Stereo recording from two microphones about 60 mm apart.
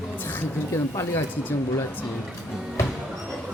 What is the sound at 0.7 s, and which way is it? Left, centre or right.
Speech, left.